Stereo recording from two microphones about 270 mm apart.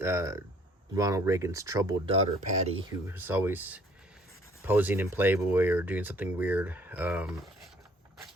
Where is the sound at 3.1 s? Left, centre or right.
Centre.